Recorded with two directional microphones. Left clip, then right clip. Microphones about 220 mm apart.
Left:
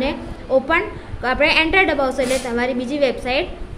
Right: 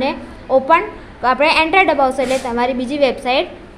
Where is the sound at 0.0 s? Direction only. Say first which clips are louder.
Right 3 dB; 10° right (ahead or behind).